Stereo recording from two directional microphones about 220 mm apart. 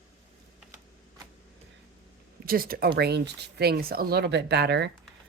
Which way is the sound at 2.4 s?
40° right (ahead or behind).